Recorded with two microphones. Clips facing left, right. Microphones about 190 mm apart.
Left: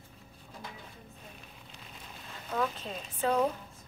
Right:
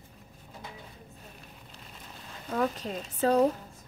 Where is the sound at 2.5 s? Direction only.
40° right (ahead or behind).